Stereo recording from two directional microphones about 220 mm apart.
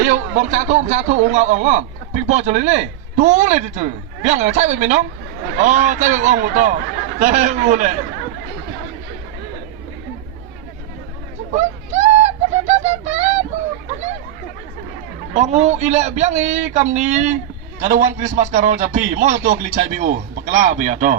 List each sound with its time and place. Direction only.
0.0 s a man's voice: 35° right (ahead or behind)
11.5 s bird: 30° right (ahead or behind)
15.3 s a man's voice: 30° right (ahead or behind)